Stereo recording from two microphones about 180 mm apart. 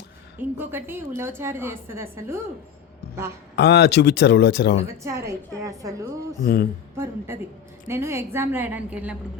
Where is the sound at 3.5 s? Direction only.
70° left (ahead or behind).